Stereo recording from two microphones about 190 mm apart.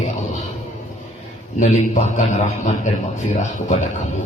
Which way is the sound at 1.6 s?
40° left (ahead or behind).